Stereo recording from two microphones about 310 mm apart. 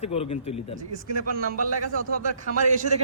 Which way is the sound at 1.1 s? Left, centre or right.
Right.